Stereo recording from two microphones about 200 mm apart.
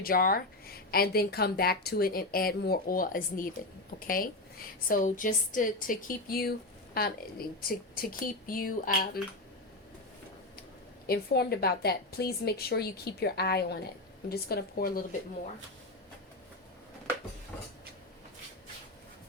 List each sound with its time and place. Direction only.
0.0 s speech: 45° left (ahead or behind)
11.0 s speech: 50° left (ahead or behind)